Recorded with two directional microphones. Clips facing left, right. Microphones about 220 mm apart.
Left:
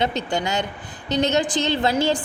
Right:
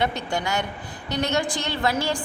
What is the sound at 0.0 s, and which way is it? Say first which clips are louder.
A woman's voice: left 2 dB; 20° left (ahead or behind).